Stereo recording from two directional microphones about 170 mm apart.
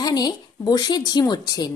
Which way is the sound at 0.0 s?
25° left (ahead or behind).